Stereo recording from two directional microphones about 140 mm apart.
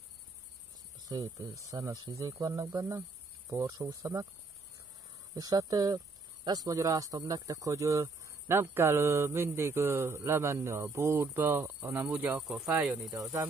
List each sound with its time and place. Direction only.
1.0 s cricket: 25° right (ahead or behind)
1.7 s speech: 25° right (ahead or behind)
5.3 s speech: 25° right (ahead or behind); by 12.7 s 5° right (ahead or behind)